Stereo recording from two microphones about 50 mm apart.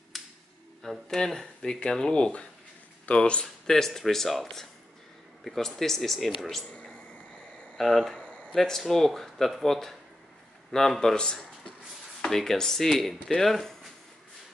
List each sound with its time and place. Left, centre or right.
0.1 s a sound: centre
0.8 s speech: centre
3.6 s a man's voice: centre
7.7 s speech: centre
8.2 s a sound: left
8.5 s speech: centre